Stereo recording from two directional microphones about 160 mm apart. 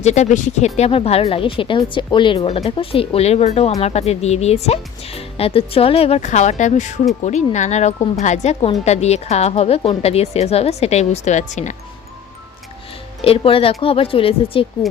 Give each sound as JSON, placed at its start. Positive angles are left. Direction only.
{"t": 0.0, "sound": "a woman's voice", "side_deg": 45}
{"t": 13.2, "sound": "speech", "side_deg": 35}